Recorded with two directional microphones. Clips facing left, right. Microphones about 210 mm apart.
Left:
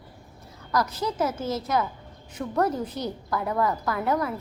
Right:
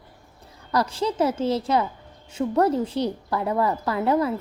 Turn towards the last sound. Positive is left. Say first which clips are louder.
# right 4 dB
turn(degrees=-25)  # may be behind; listen again after turning